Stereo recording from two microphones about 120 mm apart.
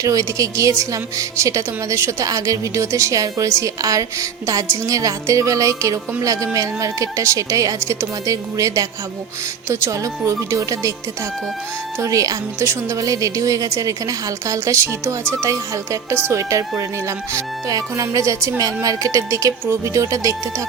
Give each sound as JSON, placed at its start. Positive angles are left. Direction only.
{"t": 0.0, "sound": "speech", "side_deg": -30}
{"t": 11.9, "sound": "speech", "side_deg": -25}